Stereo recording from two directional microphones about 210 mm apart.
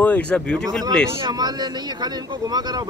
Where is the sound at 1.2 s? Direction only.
20° right (ahead or behind).